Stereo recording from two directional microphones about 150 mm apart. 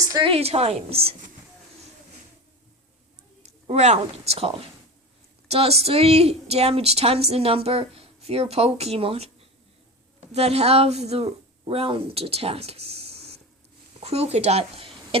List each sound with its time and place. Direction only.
0.1 s a woman's voice: 35° right (ahead or behind)
3.4 s a woman's voice: 50° right (ahead or behind)
10.3 s speech: 45° right (ahead or behind)